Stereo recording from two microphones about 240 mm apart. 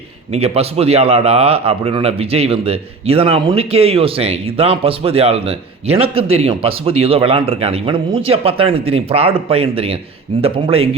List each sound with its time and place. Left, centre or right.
0.3 s a man's voice: right